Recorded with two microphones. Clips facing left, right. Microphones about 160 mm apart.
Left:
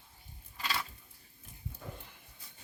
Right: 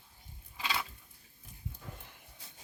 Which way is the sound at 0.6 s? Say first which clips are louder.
Right 1 dB; 10° right (ahead or behind).